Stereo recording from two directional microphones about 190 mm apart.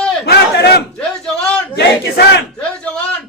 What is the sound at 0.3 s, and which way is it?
Battle cry, 60° left (ahead or behind).